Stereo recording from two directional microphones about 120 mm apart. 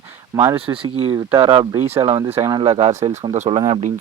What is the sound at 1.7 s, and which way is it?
Speech, 25° right (ahead or behind).